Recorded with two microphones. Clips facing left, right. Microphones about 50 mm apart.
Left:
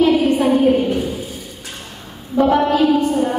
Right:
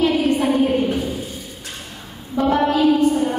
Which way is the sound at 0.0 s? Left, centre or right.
Centre.